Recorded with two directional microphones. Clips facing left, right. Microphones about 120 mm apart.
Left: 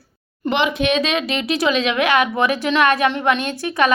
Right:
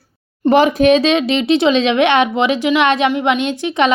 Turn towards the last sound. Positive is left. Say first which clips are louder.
# right 3 dB
turn(degrees=-20)  # may be behind; listen again after turning